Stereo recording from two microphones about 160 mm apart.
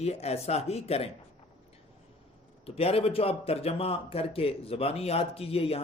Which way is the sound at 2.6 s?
40° left (ahead or behind).